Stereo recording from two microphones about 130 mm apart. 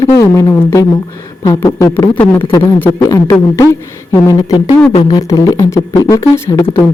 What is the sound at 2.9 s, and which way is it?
Speech, 30° left (ahead or behind).